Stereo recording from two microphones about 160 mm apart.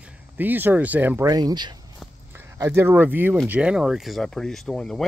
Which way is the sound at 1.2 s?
25° right (ahead or behind).